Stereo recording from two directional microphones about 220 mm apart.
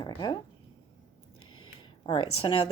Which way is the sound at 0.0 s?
20° left (ahead or behind).